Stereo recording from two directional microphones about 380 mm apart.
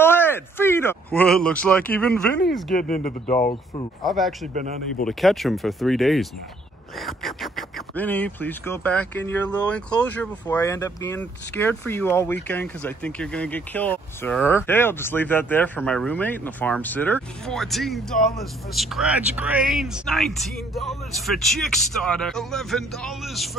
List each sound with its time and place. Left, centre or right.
0.0 s speech: centre
2.7 s speech: left
4.0 s speech: centre